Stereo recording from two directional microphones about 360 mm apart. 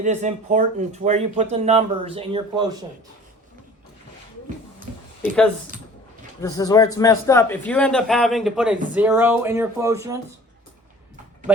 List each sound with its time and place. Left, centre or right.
0.0 s speech: centre
5.7 s a sound: right
6.4 s a man's voice: centre